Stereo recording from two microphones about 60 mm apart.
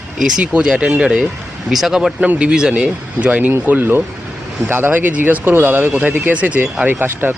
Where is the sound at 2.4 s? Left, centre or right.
Centre.